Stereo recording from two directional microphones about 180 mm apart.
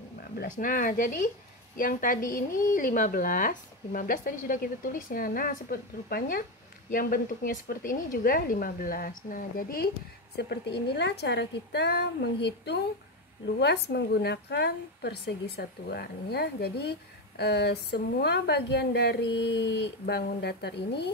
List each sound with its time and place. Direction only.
0.4 s speech: 50° left (ahead or behind)
10.3 s a woman's voice: 65° left (ahead or behind)